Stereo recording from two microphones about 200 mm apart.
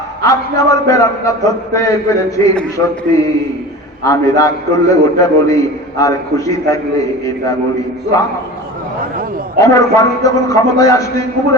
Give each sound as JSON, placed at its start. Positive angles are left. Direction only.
{"t": 0.2, "sound": "a man's voice", "side_deg": 15}
{"t": 9.6, "sound": "a man's voice", "side_deg": 15}